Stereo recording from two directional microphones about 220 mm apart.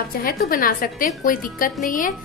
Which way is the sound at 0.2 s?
40° left (ahead or behind).